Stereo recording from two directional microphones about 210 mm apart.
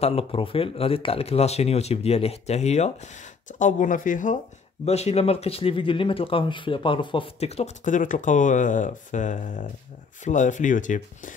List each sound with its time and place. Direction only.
0.0 s speech: 25° left (ahead or behind)